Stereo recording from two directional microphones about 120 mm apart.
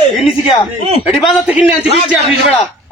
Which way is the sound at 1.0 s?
Centre (ahead or behind).